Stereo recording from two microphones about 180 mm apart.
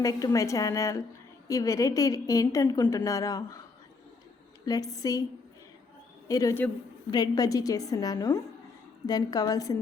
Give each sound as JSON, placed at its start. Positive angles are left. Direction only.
{"t": 0.0, "sound": "a woman's voice", "side_deg": 20}
{"t": 4.6, "sound": "a woman's voice", "side_deg": 20}
{"t": 6.2, "sound": "a man's voice", "side_deg": 20}